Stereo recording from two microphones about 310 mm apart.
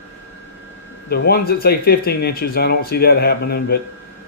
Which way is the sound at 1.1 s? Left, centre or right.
Left.